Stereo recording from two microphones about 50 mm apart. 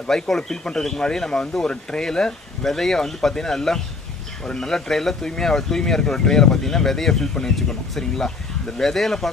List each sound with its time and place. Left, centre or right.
0.1 s speech: centre